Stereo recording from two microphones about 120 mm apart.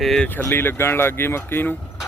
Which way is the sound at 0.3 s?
15° left (ahead or behind).